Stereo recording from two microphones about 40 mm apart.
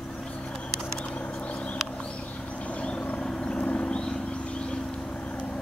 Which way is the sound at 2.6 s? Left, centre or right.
Left.